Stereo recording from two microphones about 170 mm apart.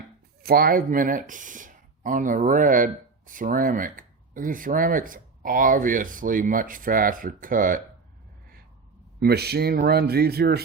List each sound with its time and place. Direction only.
0.4 s speech: 60° right (ahead or behind)
9.2 s speech: 70° right (ahead or behind)